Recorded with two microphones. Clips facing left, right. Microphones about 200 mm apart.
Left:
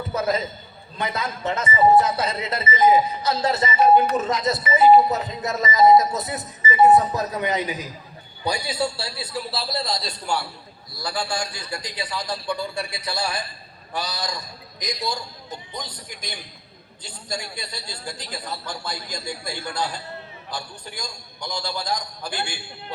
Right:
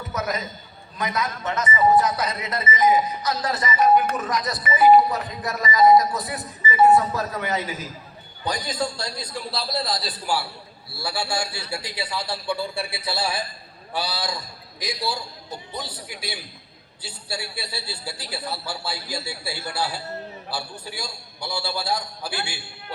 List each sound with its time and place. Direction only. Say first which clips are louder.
0.1 s a man's voice: left 4 dB; 30° left (ahead or behind); by 14.3 s 5° right (ahead or behind)
15.7 s a man's voice: right 2 dB; 5° right (ahead or behind)